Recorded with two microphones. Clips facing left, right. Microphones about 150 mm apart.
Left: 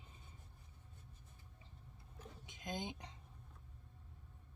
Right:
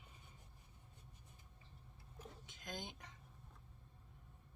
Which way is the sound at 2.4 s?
20° left (ahead or behind).